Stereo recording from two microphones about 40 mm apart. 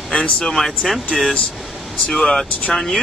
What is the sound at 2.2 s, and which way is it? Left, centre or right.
Speech, centre.